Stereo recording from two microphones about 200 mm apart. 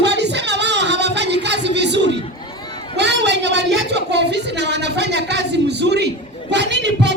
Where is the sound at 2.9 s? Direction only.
60° right (ahead or behind).